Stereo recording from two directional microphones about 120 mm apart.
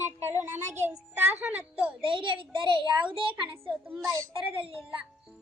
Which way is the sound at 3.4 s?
15° right (ahead or behind).